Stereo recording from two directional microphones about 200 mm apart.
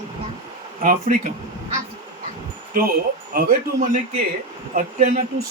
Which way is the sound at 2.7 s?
45° right (ahead or behind).